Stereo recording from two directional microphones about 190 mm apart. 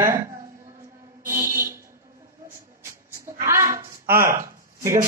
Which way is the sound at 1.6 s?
15° right (ahead or behind).